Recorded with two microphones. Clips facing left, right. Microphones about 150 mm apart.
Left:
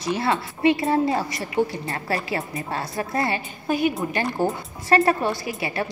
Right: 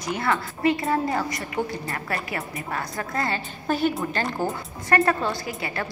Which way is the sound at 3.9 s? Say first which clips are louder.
Left 2 dB; 20° left (ahead or behind).